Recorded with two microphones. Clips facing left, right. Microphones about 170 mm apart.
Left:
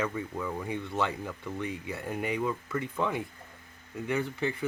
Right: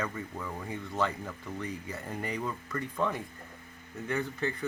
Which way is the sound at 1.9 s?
10° left (ahead or behind).